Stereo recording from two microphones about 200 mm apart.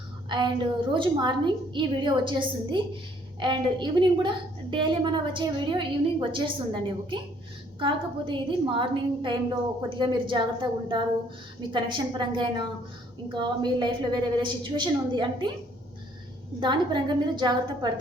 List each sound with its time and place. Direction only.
0.3 s a woman's voice: 25° right (ahead or behind)
16.6 s a woman's voice: 20° right (ahead or behind)